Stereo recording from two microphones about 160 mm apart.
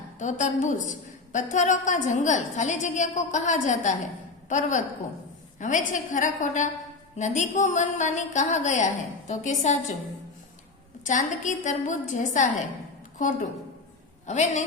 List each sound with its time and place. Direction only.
0.2 s a woman's voice: 50° left (ahead or behind)
11.0 s a woman's voice: 50° left (ahead or behind)